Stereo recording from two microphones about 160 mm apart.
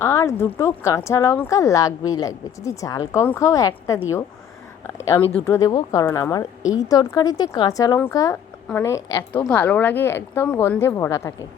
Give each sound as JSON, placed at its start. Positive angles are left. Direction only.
{"t": 0.0, "sound": "a woman's voice", "side_deg": 15}
{"t": 9.5, "sound": "a woman's voice", "side_deg": 10}